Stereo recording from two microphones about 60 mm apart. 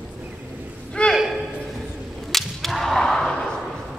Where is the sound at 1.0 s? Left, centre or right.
Centre.